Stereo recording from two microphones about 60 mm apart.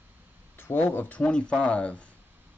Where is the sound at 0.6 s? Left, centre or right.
Left; by 2.0 s centre.